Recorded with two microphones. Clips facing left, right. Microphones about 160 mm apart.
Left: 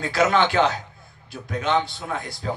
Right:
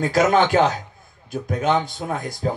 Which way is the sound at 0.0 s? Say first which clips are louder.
Right 3 dB; 45° right (ahead or behind).